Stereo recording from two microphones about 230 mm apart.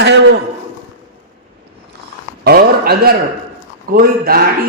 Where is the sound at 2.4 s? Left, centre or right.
Right.